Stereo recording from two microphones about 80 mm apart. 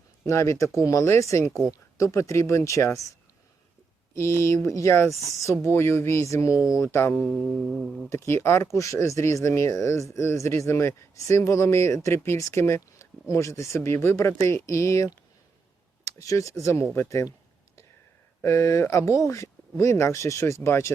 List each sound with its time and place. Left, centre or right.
0.3 s speech: left
4.1 s speech: left
6.8 s mantra: left
7.7 s speech: centre
8.1 s speech: left
18.4 s speech: left